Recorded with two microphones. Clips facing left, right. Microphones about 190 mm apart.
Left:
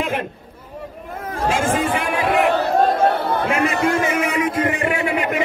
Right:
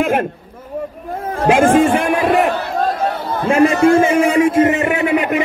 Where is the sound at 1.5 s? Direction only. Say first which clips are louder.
Right 9 dB; 60° right (ahead or behind).